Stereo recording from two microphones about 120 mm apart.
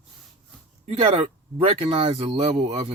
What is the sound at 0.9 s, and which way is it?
Speech, 55° right (ahead or behind).